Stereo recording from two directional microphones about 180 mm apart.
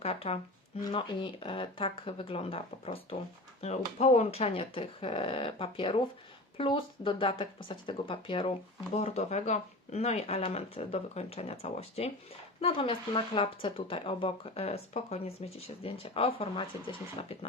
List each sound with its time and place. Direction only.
0.0 s speech: 35° left (ahead or behind)
0.8 s speech: 25° left (ahead or behind)